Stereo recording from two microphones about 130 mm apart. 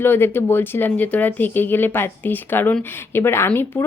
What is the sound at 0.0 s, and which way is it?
A woman's voice, 15° left (ahead or behind).